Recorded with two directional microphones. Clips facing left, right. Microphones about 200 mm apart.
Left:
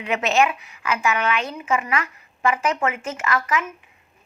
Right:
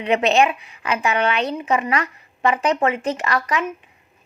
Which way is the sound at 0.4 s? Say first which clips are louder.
Right 2 dB; 30° right (ahead or behind).